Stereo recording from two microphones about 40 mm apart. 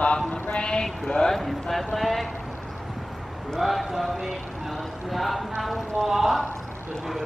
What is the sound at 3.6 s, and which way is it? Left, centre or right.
Speech, centre.